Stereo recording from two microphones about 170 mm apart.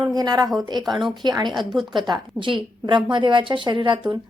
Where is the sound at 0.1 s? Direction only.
25° right (ahead or behind).